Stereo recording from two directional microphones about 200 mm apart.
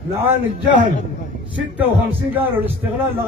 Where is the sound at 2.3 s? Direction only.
10° right (ahead or behind).